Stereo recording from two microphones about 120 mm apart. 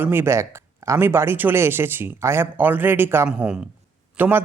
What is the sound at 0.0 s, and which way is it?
Speech, 20° right (ahead or behind).